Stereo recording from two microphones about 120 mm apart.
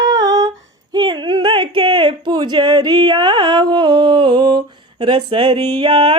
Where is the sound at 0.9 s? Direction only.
35° right (ahead or behind).